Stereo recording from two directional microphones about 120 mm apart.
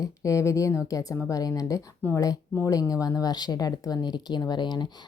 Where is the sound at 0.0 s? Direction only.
25° left (ahead or behind).